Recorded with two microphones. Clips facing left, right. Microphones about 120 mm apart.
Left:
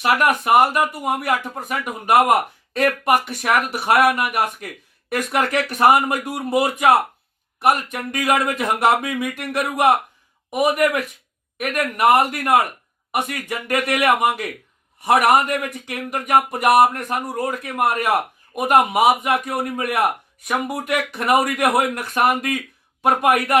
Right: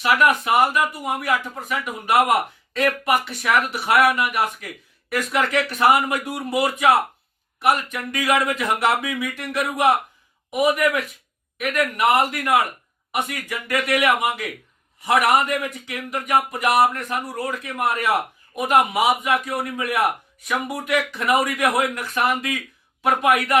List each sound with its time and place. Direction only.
0.0 s a man's voice: 50° left (ahead or behind)